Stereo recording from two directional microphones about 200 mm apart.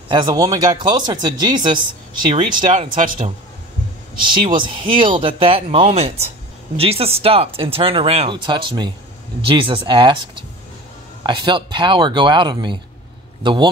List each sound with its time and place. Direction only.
0.1 s speech: 20° right (ahead or behind)
3.0 s speech: 40° right (ahead or behind)
4.3 s speech: 25° right (ahead or behind)
11.2 s a man's voice: 25° right (ahead or behind)